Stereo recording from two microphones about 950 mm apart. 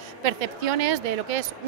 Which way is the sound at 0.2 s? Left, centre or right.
Right.